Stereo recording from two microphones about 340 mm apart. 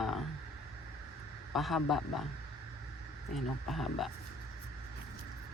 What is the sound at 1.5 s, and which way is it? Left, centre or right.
Speech, centre.